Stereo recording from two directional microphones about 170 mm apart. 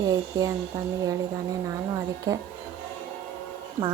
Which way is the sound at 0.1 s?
20° right (ahead or behind).